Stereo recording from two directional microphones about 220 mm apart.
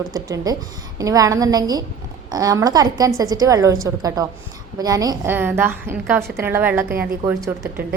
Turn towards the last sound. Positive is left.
turn(degrees=-10)  # may be behind; listen again after turning